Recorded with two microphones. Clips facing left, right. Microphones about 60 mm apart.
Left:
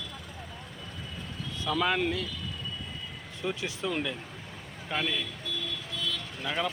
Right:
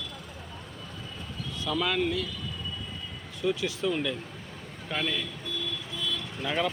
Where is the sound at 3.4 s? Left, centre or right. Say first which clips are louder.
Right 5 dB; left.